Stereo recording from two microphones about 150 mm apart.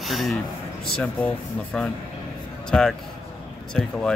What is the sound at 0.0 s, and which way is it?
A man's voice, centre (ahead or behind).